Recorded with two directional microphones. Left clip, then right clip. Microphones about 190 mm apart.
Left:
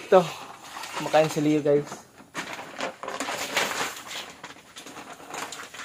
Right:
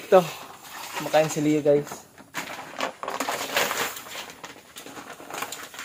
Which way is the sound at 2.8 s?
5° right (ahead or behind).